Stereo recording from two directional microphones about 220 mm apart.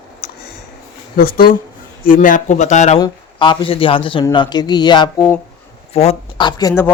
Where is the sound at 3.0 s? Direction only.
20° left (ahead or behind).